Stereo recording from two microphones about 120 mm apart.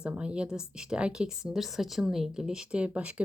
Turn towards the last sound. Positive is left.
turn(degrees=-10)  # may be behind; listen again after turning